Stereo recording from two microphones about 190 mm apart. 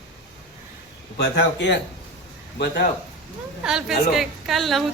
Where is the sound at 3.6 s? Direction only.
Centre (ahead or behind).